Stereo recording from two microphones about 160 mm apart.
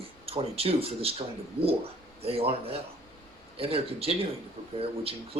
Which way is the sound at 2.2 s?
40° right (ahead or behind).